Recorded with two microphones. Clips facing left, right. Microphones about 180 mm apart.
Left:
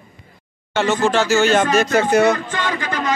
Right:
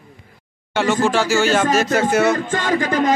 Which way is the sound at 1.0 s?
10° right (ahead or behind).